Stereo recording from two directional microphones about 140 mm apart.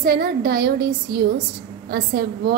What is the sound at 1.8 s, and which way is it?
Speech, 90° right.